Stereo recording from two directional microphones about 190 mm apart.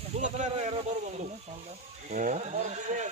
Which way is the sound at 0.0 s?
35° right (ahead or behind).